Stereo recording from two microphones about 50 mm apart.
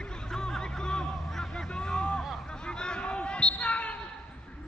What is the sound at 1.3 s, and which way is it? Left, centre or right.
Vehicle, centre.